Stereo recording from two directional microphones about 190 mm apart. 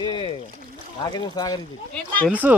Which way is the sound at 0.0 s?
25° left (ahead or behind).